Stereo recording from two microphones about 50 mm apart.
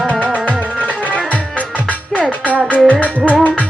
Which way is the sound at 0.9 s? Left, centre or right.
Left.